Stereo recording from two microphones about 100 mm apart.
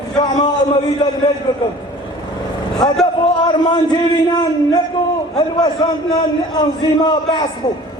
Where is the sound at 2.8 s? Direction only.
45° left (ahead or behind).